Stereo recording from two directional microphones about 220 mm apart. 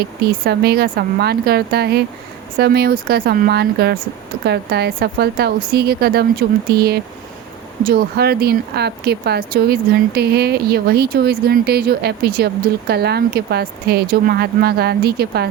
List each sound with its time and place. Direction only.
0.0 s speech: 45° right (ahead or behind)